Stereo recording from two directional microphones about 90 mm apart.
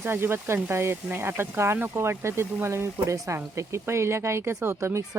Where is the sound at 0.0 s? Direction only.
25° right (ahead or behind).